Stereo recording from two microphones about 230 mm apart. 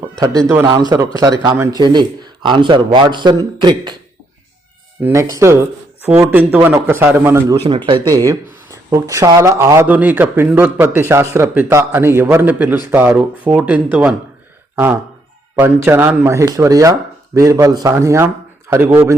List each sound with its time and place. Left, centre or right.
0.0 s speech: centre
5.0 s speech: centre
15.5 s speech: centre